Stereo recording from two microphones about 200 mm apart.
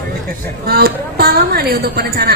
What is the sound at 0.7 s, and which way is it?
A woman's voice, 50° right (ahead or behind).